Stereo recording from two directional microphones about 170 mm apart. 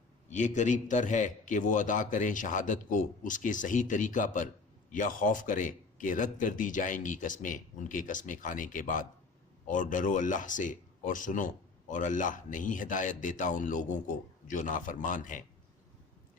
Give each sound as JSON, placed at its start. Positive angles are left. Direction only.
{"t": 0.3, "sound": "speech", "side_deg": 45}